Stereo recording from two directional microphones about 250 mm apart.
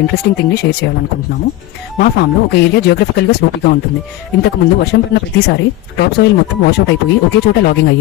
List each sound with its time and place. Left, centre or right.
0.0 s speech: left
2.0 s speech: left